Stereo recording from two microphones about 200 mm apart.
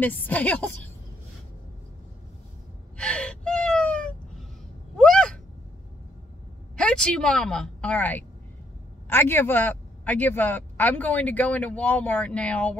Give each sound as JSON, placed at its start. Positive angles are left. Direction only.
{"t": 0.0, "sound": "speech", "side_deg": 10}
{"t": 3.0, "sound": "gasp", "side_deg": 5}
{"t": 6.8, "sound": "a woman's voice", "side_deg": 5}